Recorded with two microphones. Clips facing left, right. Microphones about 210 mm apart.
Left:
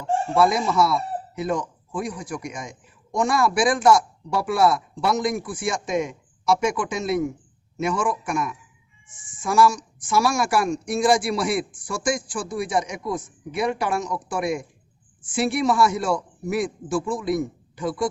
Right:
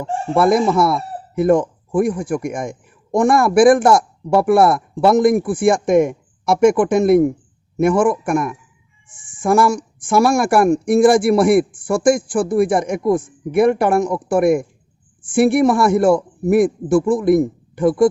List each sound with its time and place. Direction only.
0.0 s a man's voice: 55° right (ahead or behind)